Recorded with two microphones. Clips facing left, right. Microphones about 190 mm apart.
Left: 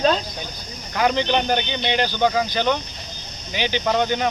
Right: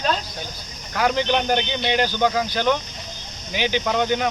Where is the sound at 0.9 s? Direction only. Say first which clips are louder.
Left 1 dB; centre (ahead or behind).